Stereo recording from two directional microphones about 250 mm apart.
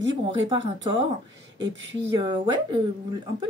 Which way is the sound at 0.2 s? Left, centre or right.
Right.